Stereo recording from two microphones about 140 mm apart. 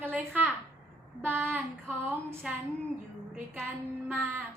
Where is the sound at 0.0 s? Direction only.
15° right (ahead or behind).